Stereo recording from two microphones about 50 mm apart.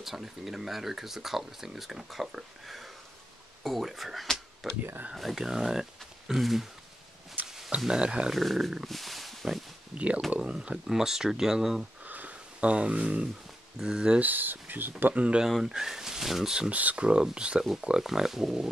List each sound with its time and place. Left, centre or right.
0.0 s speech: centre
7.4 s a sound: centre
8.0 s speech: right
8.3 s speech: centre
8.8 s a sound: centre
9.9 s speech: right; by 11.8 s centre
12.0 s a sound: right
13.7 s speech: centre
14.2 s speech: right
15.1 s speech: right
15.4 s speech: centre
16.7 s speech: right
18.0 s speech: centre